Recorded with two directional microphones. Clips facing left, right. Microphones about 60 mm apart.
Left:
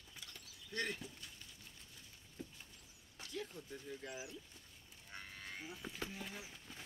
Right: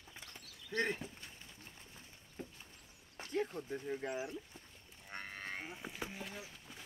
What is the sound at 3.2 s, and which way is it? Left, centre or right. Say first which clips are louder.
Speech: right 9 dB; right.